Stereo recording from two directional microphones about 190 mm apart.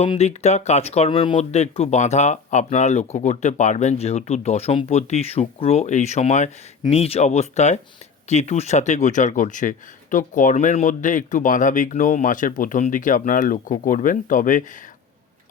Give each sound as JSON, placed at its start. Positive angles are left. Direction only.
{"t": 0.0, "sound": "speech", "side_deg": 35}